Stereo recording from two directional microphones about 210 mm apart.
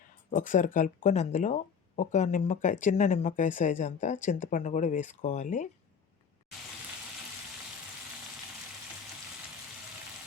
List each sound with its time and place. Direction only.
0.3 s speech: 40° left (ahead or behind)